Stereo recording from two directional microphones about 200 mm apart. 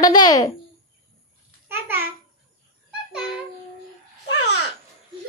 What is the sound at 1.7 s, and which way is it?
Babbling, 10° right (ahead or behind).